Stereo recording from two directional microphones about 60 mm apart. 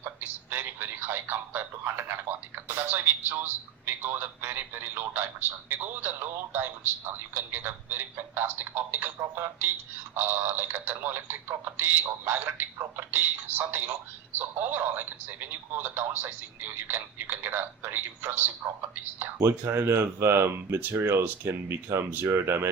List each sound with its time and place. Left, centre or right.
0.5 s a man's voice: right